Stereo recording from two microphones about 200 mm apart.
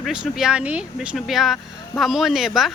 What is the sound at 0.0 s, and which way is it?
Speech, centre (ahead or behind).